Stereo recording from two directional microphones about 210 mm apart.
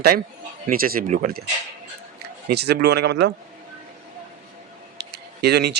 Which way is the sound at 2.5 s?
50° right (ahead or behind).